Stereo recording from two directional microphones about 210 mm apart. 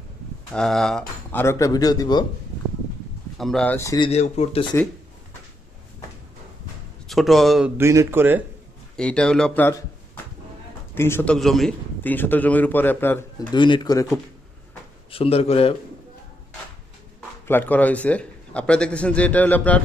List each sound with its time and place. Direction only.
0.5 s a man's voice: centre (ahead or behind); by 2.2 s 20° left (ahead or behind)
3.3 s a man's voice: centre (ahead or behind)
4.1 s speech: 30° left (ahead or behind)
7.1 s speech: centre (ahead or behind)
8.9 s speech: 5° left (ahead or behind)
11.0 s a man's voice: 10° left (ahead or behind)
13.5 s speech: 20° left (ahead or behind)
15.0 s speech: 25° left (ahead or behind)
17.5 s a man's voice: 10° left (ahead or behind)